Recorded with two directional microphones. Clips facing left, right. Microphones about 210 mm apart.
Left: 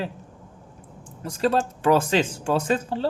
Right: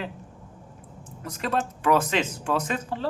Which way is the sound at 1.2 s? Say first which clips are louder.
Left 5 dB; 30° left (ahead or behind).